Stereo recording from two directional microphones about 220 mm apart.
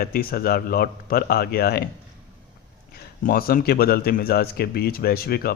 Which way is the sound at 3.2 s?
40° left (ahead or behind).